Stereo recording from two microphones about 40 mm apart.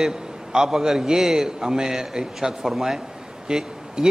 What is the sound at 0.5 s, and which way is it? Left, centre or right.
A man's voice, centre.